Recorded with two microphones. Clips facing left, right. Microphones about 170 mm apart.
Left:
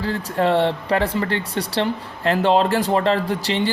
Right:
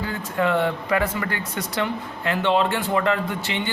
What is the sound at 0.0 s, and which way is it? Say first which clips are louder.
Speech: left 3 dB; 35° left (ahead or behind).